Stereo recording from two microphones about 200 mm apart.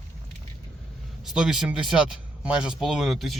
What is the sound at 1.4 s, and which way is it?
Speech, 5° right (ahead or behind).